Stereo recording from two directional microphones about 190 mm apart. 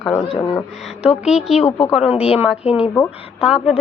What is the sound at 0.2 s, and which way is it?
Speech, 25° left (ahead or behind).